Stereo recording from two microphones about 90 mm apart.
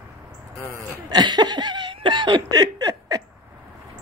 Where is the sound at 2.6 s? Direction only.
45° right (ahead or behind).